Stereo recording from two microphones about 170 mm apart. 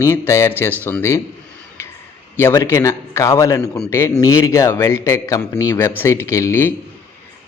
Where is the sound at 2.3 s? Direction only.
15° left (ahead or behind).